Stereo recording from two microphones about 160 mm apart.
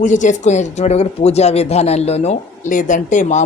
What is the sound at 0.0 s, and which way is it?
Speech, 50° left (ahead or behind).